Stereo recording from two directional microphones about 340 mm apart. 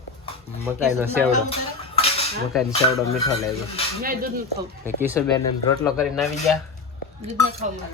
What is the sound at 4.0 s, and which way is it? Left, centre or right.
Speech, right.